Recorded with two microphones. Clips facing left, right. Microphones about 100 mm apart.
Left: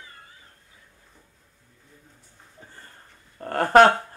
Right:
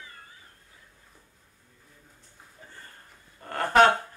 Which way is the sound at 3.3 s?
50° left (ahead or behind).